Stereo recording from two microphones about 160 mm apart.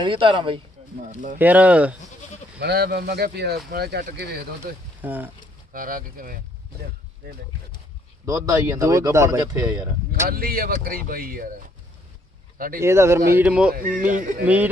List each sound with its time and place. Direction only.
0.0 s speech: 30° right (ahead or behind)
1.4 s a man's voice: 10° right (ahead or behind)
2.6 s speech: 85° right
5.0 s a man's voice: 10° right (ahead or behind)
5.7 s speech: 60° right (ahead or behind)
7.2 s speech: 80° right
8.3 s speech: 20° right (ahead or behind)
10.2 s speech: 65° right (ahead or behind)
12.5 s speech: 60° right (ahead or behind)
12.8 s a man's voice: 15° right (ahead or behind)
13.7 s speech: 65° right (ahead or behind)
14.4 s a man's voice: 10° right (ahead or behind)